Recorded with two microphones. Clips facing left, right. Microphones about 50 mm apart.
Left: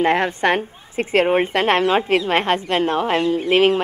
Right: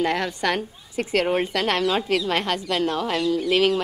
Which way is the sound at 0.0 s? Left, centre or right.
Left.